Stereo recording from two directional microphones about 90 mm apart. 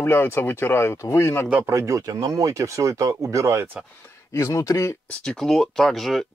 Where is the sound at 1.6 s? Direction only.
35° right (ahead or behind).